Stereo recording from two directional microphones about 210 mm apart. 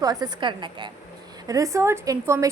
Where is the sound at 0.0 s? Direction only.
20° right (ahead or behind).